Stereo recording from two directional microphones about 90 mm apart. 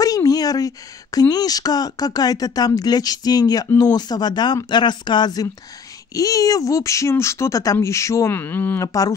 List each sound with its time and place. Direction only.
0.0 s a sound: 40° left (ahead or behind)
1.3 s speech: 45° left (ahead or behind)
8.3 s speech: 20° left (ahead or behind)
8.8 s speech: 40° left (ahead or behind)